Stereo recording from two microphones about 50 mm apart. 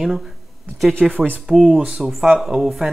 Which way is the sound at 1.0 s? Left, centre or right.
Centre.